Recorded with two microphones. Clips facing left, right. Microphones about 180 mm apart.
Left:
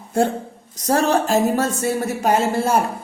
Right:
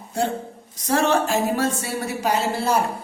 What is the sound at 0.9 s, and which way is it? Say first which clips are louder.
Speech: left 2 dB; 40° left (ahead or behind).